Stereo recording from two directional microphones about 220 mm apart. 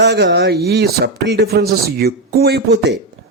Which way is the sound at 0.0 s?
50° right (ahead or behind).